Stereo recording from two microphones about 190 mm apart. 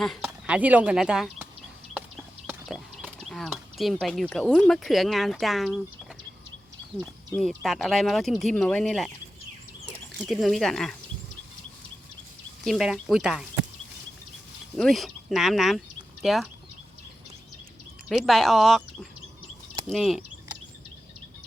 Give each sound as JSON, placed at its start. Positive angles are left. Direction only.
{"t": 0.0, "sound": "speech", "side_deg": 0}
{"t": 2.6, "sound": "a sound", "side_deg": 0}
{"t": 4.0, "sound": "speech", "side_deg": 0}
{"t": 7.3, "sound": "speech", "side_deg": 0}
{"t": 10.2, "sound": "speech", "side_deg": 0}
{"t": 12.6, "sound": "speech", "side_deg": 0}
{"t": 14.8, "sound": "speech", "side_deg": 0}
{"t": 18.1, "sound": "speech", "side_deg": 0}
{"t": 19.9, "sound": "a sound", "side_deg": 0}